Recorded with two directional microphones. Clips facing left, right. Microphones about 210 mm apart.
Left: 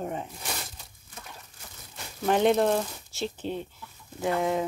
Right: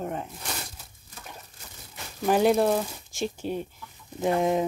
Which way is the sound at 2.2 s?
5° right (ahead or behind).